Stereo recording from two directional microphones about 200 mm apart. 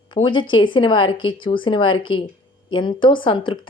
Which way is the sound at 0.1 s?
25° left (ahead or behind).